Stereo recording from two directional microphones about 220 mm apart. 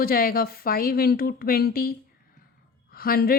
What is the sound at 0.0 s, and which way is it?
A woman's voice, 40° left (ahead or behind).